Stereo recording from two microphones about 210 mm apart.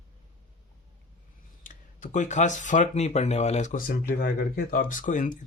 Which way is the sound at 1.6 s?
35° left (ahead or behind).